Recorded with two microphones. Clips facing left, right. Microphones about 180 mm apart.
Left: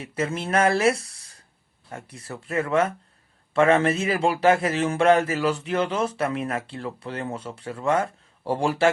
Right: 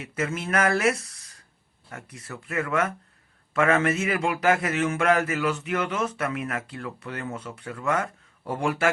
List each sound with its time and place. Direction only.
0.0 s a man's voice: 30° left (ahead or behind)